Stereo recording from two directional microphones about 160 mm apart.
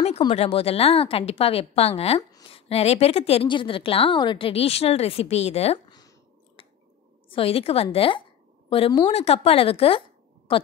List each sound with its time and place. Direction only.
0.3 s a woman's voice: 40° left (ahead or behind)
5.9 s a sound: 25° left (ahead or behind)
7.2 s a woman's voice: 35° left (ahead or behind)